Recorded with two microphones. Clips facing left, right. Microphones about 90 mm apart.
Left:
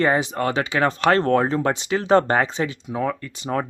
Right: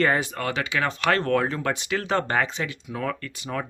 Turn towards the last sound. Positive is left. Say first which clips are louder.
# left 6 dB
turn(degrees=35)  # may be behind; listen again after turning